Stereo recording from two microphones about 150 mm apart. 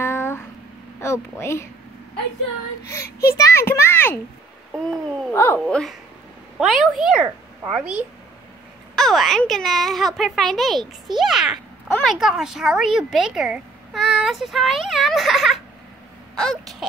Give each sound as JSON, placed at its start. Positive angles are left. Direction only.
{"t": 0.0, "sound": "a sound", "side_deg": 15}
{"t": 1.0, "sound": "a child's voice", "side_deg": 15}
{"t": 2.9, "sound": "a child's voice", "side_deg": 20}
{"t": 4.7, "sound": "speech", "side_deg": 5}
{"t": 5.3, "sound": "a child's voice", "side_deg": 15}
{"t": 5.7, "sound": "speech", "side_deg": 5}